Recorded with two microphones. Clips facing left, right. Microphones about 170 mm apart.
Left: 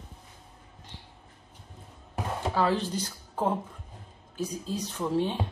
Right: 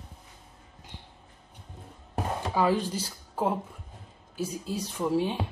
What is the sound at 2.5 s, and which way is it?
A woman's voice, 10° right (ahead or behind).